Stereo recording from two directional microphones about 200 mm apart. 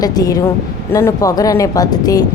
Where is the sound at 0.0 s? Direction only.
20° left (ahead or behind).